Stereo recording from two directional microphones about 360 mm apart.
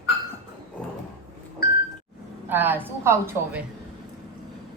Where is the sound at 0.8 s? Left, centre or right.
Centre.